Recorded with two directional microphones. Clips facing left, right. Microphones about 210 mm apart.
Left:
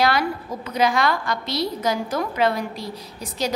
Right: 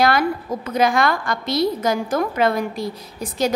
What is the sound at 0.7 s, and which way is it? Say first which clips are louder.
A woman's voice: right 2 dB; 50° right (ahead or behind).